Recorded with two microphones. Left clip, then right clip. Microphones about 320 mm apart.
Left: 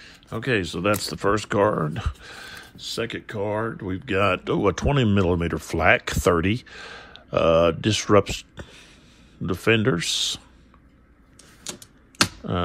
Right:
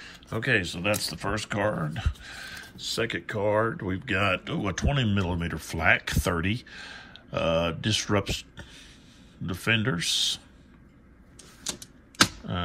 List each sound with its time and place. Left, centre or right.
0.0 s speech: centre
11.6 s typewriter: centre